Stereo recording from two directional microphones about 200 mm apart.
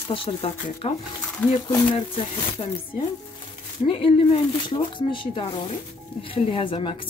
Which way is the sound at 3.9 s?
25° left (ahead or behind).